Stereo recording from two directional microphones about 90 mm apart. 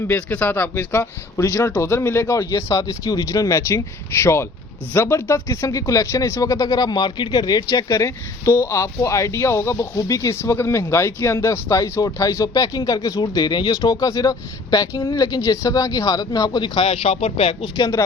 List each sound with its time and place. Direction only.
0.1 s speech: 15° left (ahead or behind); by 2.5 s 30° left (ahead or behind)
2.5 s a man's voice: 45° left (ahead or behind); by 17.7 s 85° left
17.7 s speech: 40° left (ahead or behind)